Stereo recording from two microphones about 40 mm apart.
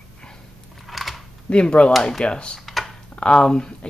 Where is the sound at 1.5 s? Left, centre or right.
Left.